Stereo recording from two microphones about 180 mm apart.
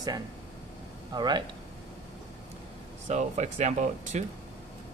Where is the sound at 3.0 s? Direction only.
40° right (ahead or behind).